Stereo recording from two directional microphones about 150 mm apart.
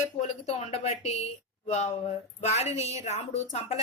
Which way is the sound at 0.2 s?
45° left (ahead or behind).